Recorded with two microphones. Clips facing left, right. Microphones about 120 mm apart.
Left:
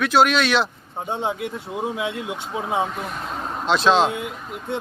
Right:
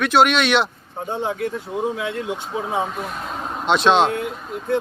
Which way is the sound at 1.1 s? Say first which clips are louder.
Right 2 dB; 15° left (ahead or behind).